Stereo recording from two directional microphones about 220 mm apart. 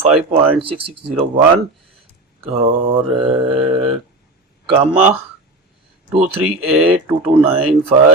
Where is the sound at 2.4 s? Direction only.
25° right (ahead or behind).